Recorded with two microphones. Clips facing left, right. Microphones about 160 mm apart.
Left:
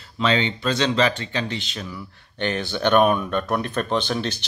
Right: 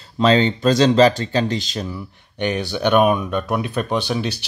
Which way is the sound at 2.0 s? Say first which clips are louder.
Right 3 dB; 15° right (ahead or behind).